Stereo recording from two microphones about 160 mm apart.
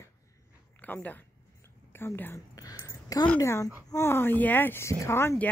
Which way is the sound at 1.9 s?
15° left (ahead or behind).